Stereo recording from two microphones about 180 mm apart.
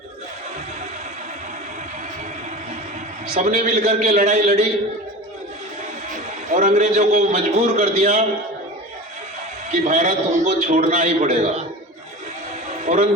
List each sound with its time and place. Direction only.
3.3 s a man's voice: 40° right (ahead or behind)
6.5 s a man's voice: 45° right (ahead or behind)
9.8 s a man's voice: 40° right (ahead or behind)
12.8 s a sound: 40° right (ahead or behind)